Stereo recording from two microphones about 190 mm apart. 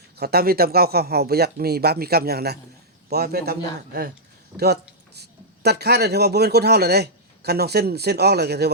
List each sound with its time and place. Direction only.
0.2 s speech: 55° right (ahead or behind)